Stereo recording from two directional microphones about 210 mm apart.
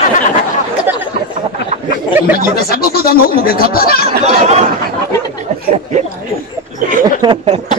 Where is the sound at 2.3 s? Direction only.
45° left (ahead or behind).